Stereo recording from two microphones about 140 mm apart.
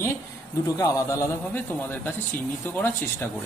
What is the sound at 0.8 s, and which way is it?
Speech, 20° left (ahead or behind).